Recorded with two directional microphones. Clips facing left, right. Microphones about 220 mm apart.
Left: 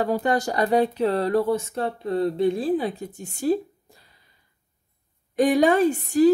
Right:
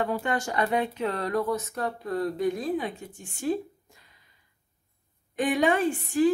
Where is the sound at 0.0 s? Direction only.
35° left (ahead or behind).